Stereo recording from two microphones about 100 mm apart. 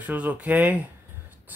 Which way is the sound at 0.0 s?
15° right (ahead or behind).